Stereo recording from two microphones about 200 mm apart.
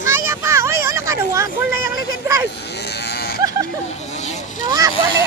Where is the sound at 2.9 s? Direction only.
55° left (ahead or behind).